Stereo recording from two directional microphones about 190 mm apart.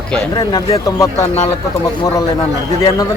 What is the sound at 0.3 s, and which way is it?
Speech, 20° left (ahead or behind).